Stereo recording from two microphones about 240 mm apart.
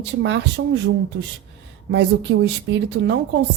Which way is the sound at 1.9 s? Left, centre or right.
Right.